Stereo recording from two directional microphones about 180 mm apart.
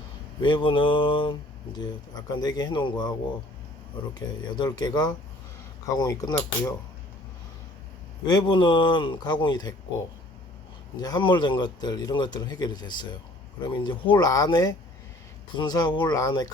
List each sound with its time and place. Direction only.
0.4 s speech: 25° left (ahead or behind)
8.2 s speech: 25° left (ahead or behind)
11.0 s speech: 25° left (ahead or behind)